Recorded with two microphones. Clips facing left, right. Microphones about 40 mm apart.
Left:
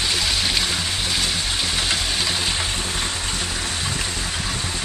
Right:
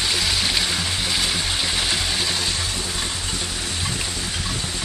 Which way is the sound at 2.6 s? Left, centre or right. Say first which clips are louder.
Left 2 dB; left.